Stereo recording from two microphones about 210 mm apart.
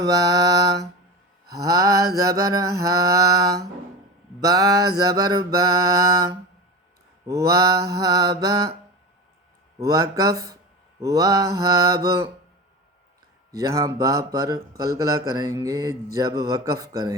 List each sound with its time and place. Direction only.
0.0 s mantra: 15° right (ahead or behind)
7.3 s mantra: 15° right (ahead or behind)
9.8 s mantra: 15° right (ahead or behind)
13.6 s mantra: 15° right (ahead or behind)